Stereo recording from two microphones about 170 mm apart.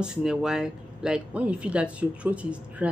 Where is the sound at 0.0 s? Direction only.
5° right (ahead or behind).